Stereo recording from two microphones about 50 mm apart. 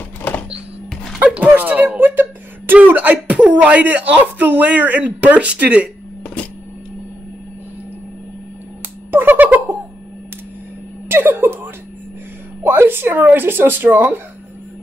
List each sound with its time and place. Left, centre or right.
1.2 s speech: right
6.2 s printer: left
9.1 s finger snapping: right
11.1 s a sound: right
12.6 s speech: right